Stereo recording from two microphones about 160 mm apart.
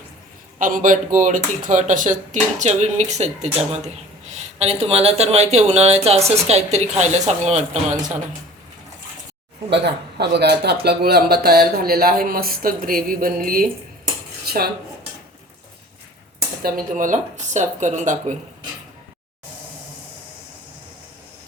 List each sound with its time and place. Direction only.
0.6 s speech: 55° right (ahead or behind)
9.6 s speech: 90° right; by 13.7 s 60° right (ahead or behind)
14.4 s dishes: 75° right (ahead or behind)
16.6 s speech: 60° right (ahead or behind)